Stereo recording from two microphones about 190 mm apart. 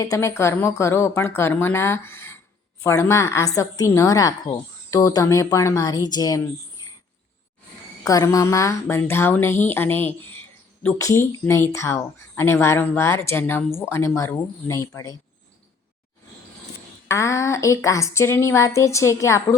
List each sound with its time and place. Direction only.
0.0 s a woman's voice: 15° left (ahead or behind)
8.0 s a woman's voice: 20° left (ahead or behind)
17.1 s a woman's voice: 15° left (ahead or behind)